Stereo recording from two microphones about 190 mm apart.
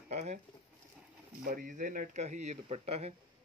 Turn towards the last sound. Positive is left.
turn(degrees=-35)  # may be behind; listen again after turning